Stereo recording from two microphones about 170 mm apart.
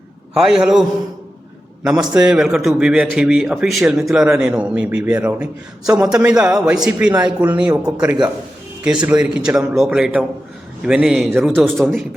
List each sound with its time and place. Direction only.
0.3 s a man's voice: 5° right (ahead or behind)
1.9 s a man's voice: 5° right (ahead or behind)
8.8 s a man's voice: 5° right (ahead or behind)